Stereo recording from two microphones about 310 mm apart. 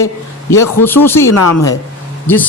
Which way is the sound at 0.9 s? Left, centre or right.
Centre.